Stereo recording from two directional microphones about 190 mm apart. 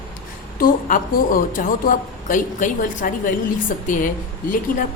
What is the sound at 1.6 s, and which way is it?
A woman's voice, 45° left (ahead or behind).